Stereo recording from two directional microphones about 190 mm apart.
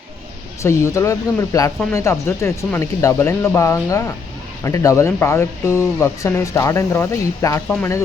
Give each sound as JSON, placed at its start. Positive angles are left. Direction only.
{"t": 0.6, "sound": "speech", "side_deg": 15}